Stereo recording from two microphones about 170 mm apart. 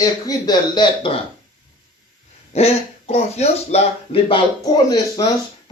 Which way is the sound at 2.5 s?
40° left (ahead or behind).